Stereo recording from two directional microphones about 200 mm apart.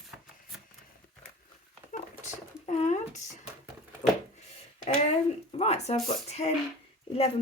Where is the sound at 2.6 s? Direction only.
35° left (ahead or behind).